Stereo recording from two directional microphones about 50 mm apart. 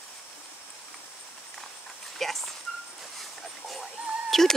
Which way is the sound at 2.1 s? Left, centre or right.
Centre.